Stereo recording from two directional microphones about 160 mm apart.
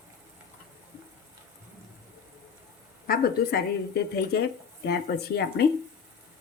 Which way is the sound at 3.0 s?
70° left (ahead or behind).